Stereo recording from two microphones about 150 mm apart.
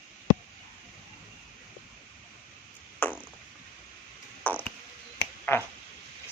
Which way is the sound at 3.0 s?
15° left (ahead or behind).